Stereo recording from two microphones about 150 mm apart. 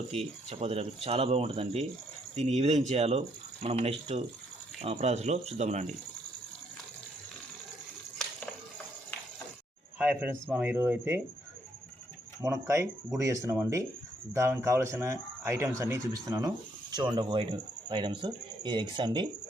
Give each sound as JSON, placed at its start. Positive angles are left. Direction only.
{"t": 0.1, "sound": "speech", "side_deg": -45}
{"t": 10.0, "sound": "a man's voice", "side_deg": -10}
{"t": 12.4, "sound": "speech", "side_deg": -20}